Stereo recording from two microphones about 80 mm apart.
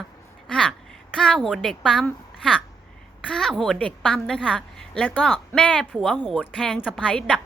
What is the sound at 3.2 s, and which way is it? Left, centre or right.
A woman's voice, centre.